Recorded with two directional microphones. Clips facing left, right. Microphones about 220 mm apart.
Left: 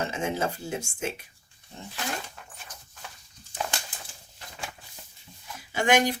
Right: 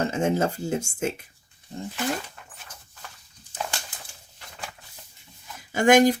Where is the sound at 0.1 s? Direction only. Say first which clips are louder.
Right 6 dB; 45° right (ahead or behind).